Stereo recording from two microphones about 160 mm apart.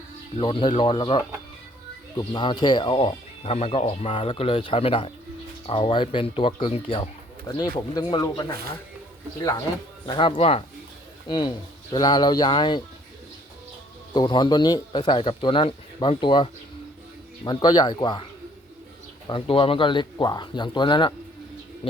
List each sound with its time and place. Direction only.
0.3 s speech: 35° left (ahead or behind)
10.1 s speech: 30° left (ahead or behind)
14.1 s speech: 25° left (ahead or behind)
19.3 s speech: 35° left (ahead or behind)